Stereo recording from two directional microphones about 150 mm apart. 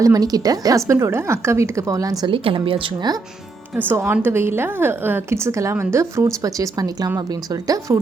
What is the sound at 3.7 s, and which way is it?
A woman's voice, 15° right (ahead or behind).